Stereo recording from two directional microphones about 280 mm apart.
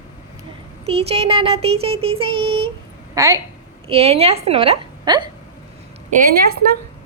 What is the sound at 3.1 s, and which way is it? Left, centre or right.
Speech, centre.